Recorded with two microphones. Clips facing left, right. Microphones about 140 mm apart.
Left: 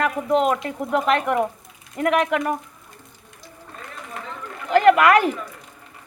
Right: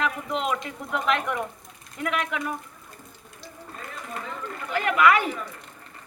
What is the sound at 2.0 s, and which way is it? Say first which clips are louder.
Speech: left 9 dB; 60° left (ahead or behind).